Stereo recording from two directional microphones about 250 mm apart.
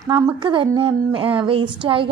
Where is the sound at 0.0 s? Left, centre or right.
Centre.